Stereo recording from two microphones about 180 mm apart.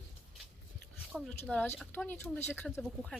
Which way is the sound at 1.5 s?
10° left (ahead or behind).